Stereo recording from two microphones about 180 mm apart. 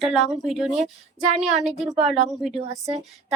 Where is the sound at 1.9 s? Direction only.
35° right (ahead or behind).